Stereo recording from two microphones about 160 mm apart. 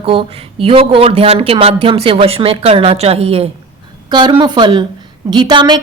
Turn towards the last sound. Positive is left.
turn(degrees=-30)  # may be behind; listen again after turning